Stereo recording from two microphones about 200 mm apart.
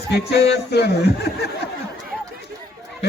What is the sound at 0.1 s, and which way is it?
A man's voice, 55° left (ahead or behind).